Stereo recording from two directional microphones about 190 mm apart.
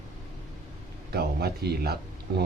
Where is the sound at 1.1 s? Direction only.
55° right (ahead or behind).